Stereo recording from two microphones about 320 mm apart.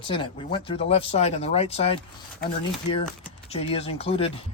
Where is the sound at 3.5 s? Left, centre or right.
Centre.